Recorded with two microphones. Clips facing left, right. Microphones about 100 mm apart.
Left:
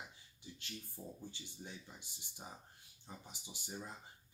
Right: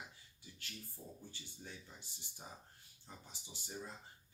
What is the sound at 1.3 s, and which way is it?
Speech, 15° left (ahead or behind).